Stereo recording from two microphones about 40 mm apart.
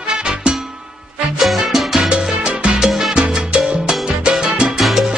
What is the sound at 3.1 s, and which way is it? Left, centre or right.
Salsa music, right.